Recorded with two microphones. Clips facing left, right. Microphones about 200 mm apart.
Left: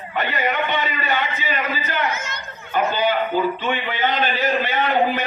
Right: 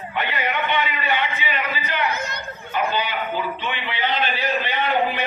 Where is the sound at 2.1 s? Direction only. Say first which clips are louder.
Right 1 dB; 35° right (ahead or behind).